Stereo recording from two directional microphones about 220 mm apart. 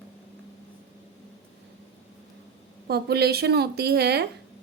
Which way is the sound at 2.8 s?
45° right (ahead or behind).